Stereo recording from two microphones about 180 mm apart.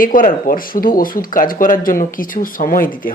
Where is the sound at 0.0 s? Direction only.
50° left (ahead or behind).